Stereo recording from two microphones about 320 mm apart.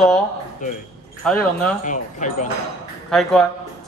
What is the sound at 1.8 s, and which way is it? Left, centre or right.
Speech, left.